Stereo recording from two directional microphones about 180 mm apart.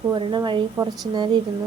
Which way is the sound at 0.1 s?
25° right (ahead or behind).